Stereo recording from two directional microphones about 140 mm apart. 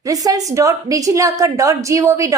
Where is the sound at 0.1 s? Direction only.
25° right (ahead or behind).